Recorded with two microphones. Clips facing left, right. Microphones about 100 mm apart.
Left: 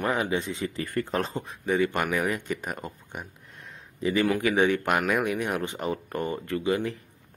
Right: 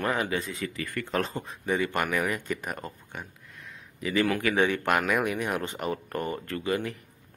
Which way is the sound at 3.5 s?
30° left (ahead or behind).